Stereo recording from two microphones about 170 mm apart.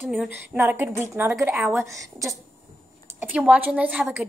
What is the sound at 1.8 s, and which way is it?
Speech, 20° right (ahead or behind).